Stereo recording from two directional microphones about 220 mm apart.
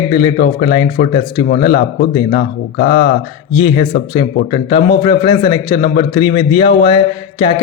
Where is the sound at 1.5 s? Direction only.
45° left (ahead or behind).